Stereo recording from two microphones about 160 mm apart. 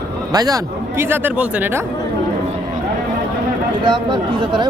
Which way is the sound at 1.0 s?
10° right (ahead or behind).